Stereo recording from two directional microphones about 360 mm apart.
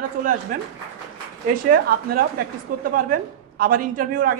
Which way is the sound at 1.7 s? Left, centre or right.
Right.